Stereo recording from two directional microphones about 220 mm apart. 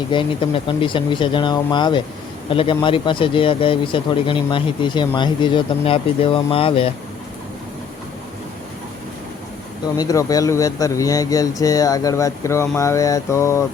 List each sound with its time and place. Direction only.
0.1 s a man's voice: 25° left (ahead or behind)
10.0 s speech: 15° left (ahead or behind)